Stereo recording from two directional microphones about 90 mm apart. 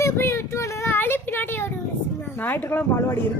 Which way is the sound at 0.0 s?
30° left (ahead or behind).